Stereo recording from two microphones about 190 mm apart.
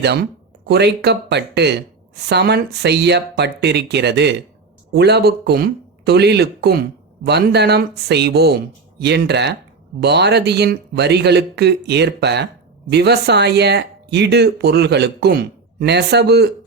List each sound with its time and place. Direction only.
0.0 s speech: 60° right (ahead or behind)